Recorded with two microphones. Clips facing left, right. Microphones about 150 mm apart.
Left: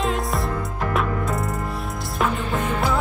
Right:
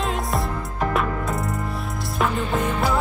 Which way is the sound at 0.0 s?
Centre (ahead or behind).